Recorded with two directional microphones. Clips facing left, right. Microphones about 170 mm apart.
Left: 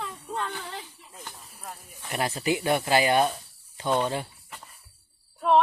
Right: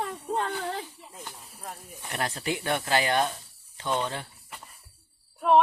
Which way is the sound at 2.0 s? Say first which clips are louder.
Left 4 dB; 10° left (ahead or behind).